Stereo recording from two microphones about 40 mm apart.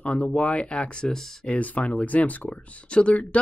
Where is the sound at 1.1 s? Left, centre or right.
Centre.